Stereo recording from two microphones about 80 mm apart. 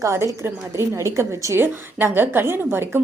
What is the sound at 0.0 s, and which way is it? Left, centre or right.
A woman's voice, right.